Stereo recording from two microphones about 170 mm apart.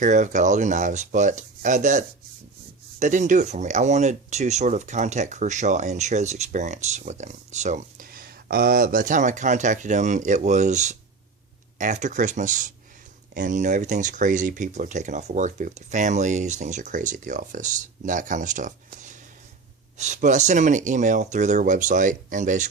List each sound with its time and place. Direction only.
0.0 s speech: 45° right (ahead or behind)